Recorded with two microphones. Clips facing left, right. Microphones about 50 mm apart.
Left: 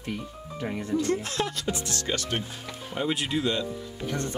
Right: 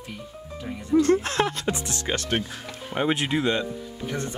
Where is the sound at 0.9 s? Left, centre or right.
Right.